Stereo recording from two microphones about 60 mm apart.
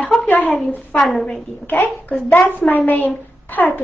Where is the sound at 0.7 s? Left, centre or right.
Left.